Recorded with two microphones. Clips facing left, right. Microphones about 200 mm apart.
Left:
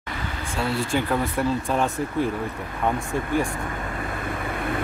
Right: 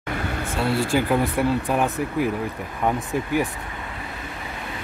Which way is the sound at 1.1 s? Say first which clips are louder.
Right 3 dB; 15° right (ahead or behind).